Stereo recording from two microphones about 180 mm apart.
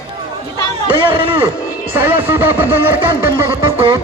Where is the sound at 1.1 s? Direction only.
30° right (ahead or behind).